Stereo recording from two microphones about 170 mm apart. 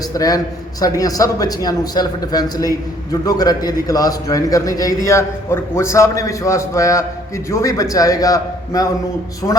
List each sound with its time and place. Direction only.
0.1 s a man's voice: 20° left (ahead or behind)